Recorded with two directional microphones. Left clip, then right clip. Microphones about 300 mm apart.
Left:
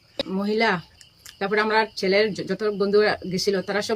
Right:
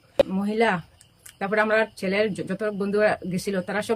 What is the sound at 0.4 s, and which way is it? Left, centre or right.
Speech, centre.